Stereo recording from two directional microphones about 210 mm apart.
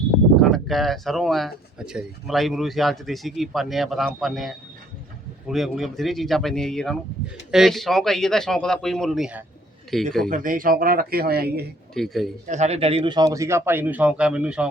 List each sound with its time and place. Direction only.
0.4 s speech: centre (ahead or behind)
10.2 s speech: 40° right (ahead or behind)
11.9 s speech: centre (ahead or behind)
12.5 s a man's voice: 30° right (ahead or behind); by 14.7 s 5° right (ahead or behind)